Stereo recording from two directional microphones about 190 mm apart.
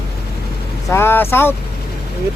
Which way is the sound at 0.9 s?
10° left (ahead or behind).